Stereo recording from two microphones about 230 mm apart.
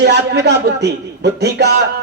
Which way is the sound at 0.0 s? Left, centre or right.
Right.